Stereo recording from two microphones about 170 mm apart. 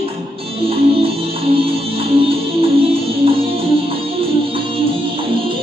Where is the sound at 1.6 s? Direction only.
35° right (ahead or behind).